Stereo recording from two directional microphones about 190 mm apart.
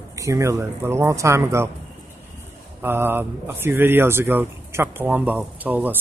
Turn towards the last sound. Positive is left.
turn(degrees=-10)  # may be behind; listen again after turning